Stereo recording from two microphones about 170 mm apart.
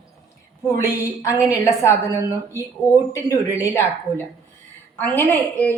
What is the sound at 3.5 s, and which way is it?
A woman's voice, 15° left (ahead or behind).